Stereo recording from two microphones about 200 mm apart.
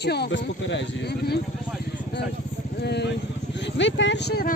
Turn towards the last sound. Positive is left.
turn(degrees=55)  # may be behind; listen again after turning